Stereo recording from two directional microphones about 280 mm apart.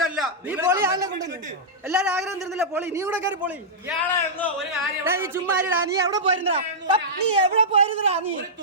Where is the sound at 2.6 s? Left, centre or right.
Centre.